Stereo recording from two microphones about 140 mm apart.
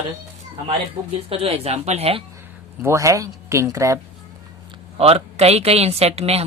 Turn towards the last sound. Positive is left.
turn(degrees=-45)  # may be behind; listen again after turning